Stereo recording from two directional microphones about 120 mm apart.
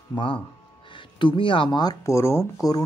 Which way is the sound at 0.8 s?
40° left (ahead or behind).